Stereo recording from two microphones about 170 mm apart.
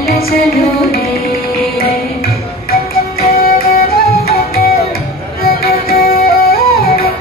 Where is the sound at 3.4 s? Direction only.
65° left (ahead or behind).